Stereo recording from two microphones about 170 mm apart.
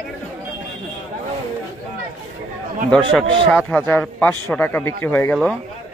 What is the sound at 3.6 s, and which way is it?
A man's voice, 5° left (ahead or behind).